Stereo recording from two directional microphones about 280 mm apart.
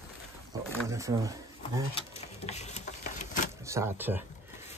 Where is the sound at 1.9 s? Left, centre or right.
Left.